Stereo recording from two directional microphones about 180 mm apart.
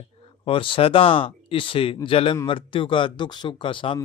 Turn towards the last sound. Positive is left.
turn(degrees=30)  # may be behind; listen again after turning